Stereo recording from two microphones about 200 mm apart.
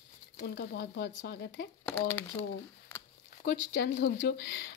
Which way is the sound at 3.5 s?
55° left (ahead or behind).